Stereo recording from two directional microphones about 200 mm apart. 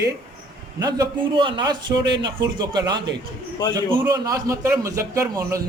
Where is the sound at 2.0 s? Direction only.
60° right (ahead or behind).